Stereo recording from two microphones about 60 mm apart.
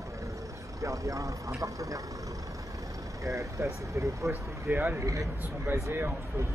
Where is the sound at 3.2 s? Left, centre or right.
Right.